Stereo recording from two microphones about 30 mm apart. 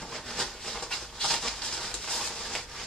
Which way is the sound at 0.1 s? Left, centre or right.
Centre.